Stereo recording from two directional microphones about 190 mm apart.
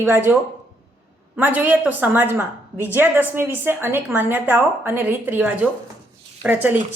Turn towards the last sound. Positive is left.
turn(degrees=-10)  # may be behind; listen again after turning